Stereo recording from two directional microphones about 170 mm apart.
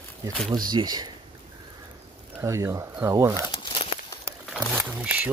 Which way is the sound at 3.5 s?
30° left (ahead or behind).